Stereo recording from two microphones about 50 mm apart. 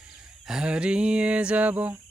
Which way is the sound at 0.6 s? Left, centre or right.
Right.